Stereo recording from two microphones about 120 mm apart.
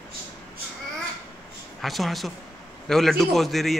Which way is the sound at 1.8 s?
Centre (ahead or behind).